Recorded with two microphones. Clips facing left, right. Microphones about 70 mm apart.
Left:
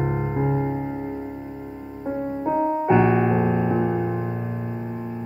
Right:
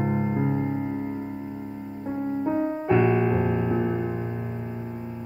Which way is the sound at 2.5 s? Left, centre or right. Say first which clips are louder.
Left 5 dB; centre.